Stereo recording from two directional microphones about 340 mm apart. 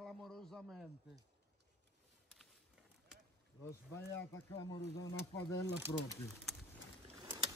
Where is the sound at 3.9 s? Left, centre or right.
Centre.